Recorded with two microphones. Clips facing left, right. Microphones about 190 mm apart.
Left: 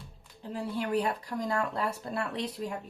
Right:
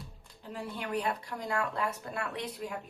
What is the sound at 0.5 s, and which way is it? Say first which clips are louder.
Speech: left 5 dB; 35° left (ahead or behind).